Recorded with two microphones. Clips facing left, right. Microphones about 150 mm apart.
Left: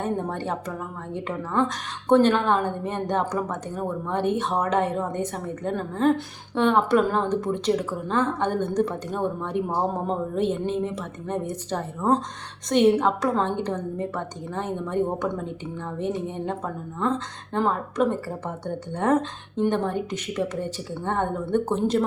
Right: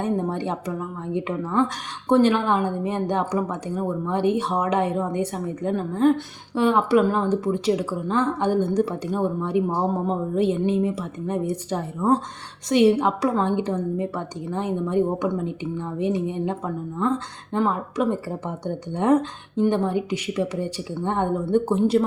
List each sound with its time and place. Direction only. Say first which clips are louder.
0.0 s a woman's voice: right 3 dB; 15° right (ahead or behind)